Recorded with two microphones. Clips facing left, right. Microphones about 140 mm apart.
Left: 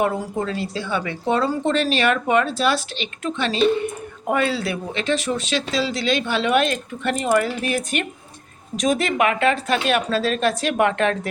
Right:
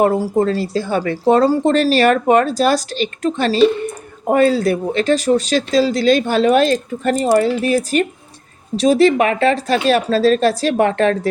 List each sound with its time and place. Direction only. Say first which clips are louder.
0.0 s speech: right 8 dB; 40° right (ahead or behind)